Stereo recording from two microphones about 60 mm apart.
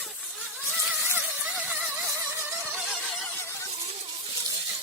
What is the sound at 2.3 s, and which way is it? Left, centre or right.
Music, right.